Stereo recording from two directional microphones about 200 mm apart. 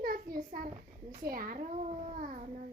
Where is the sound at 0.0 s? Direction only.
45° right (ahead or behind).